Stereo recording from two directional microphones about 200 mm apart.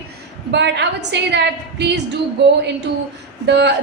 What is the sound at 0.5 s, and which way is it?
A woman's voice, 60° right (ahead or behind).